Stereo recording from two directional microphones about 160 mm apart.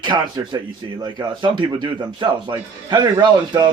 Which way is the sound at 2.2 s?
25° right (ahead or behind).